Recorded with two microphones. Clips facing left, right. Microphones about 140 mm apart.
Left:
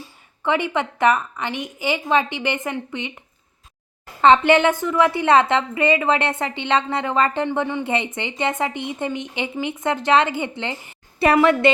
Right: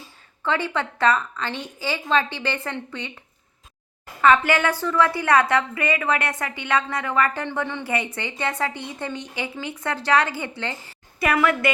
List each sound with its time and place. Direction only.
0.4 s a woman's voice: 15° left (ahead or behind)
4.2 s a woman's voice: 25° left (ahead or behind)